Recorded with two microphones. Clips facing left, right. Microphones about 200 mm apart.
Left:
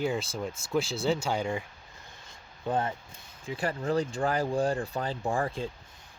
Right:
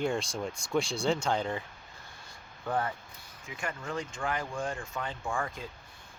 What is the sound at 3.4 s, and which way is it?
Speech, 35° left (ahead or behind).